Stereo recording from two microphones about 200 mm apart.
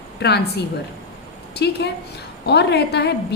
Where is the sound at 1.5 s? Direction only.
55° left (ahead or behind).